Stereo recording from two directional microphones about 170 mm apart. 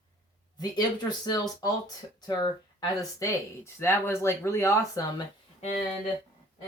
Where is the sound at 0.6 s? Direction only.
25° left (ahead or behind).